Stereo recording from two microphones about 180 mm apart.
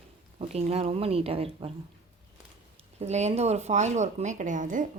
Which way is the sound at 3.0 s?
40° right (ahead or behind).